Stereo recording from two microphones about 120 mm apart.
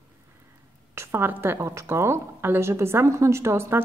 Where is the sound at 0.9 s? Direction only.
20° right (ahead or behind).